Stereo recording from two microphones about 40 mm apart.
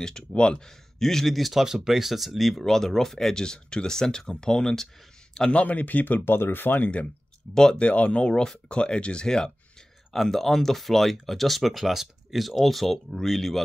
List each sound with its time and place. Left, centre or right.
0.3 s speech: left
0.9 s speech: centre
3.3 s speech: centre
5.5 s speech: left
7.7 s speech: left
8.3 s speech: centre
10.1 s speech: centre